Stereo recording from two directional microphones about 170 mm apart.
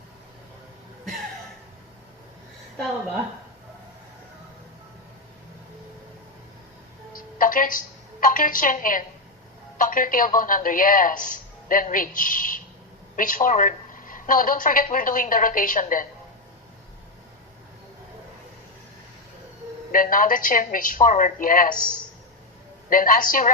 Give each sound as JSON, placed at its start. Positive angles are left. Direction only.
{"t": 7.2, "sound": "a woman's voice", "side_deg": 55}
{"t": 19.9, "sound": "a woman's voice", "side_deg": 55}
{"t": 22.9, "sound": "a woman's voice", "side_deg": 55}